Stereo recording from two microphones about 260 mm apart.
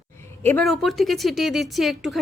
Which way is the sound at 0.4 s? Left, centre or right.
Centre.